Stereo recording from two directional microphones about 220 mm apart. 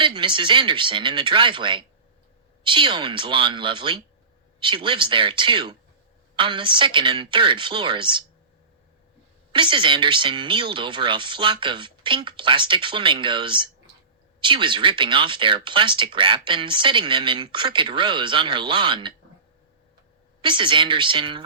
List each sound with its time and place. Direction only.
0.0 s speech: 20° right (ahead or behind)
9.5 s speech: 20° right (ahead or behind)
20.4 s speech: 20° right (ahead or behind)